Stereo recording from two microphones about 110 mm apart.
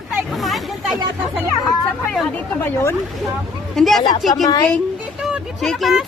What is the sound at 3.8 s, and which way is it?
Speech, centre (ahead or behind).